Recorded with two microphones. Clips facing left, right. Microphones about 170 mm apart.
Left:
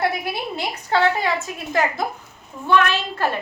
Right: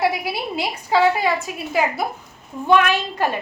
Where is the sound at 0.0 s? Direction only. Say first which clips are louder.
Right 2 dB; 10° right (ahead or behind).